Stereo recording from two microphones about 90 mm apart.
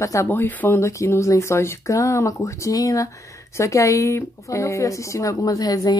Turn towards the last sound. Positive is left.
turn(degrees=45)  # may be behind; listen again after turning